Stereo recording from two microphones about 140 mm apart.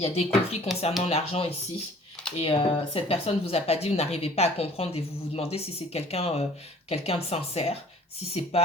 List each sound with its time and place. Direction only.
0.0 s a woman's voice: 45° left (ahead or behind)